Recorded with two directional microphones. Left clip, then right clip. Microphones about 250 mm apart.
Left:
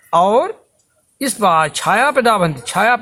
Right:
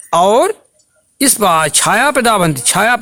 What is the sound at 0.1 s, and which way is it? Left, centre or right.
A man's voice, right.